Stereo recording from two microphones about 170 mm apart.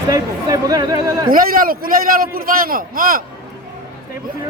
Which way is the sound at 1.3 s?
55° right (ahead or behind).